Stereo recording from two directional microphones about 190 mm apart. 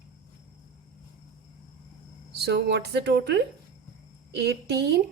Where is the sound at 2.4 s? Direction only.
60° right (ahead or behind).